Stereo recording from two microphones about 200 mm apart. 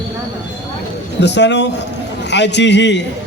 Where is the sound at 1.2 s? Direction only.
60° left (ahead or behind).